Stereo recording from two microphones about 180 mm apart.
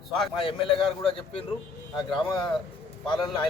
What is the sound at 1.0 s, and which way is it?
Speech, 30° left (ahead or behind).